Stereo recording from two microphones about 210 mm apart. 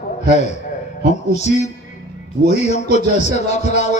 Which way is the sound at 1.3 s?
35° left (ahead or behind).